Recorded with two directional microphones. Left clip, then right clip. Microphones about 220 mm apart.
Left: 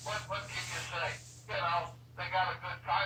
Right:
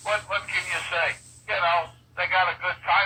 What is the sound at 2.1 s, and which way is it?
Speech, 45° right (ahead or behind).